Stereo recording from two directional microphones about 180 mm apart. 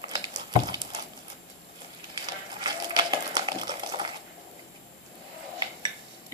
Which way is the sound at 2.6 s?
25° right (ahead or behind).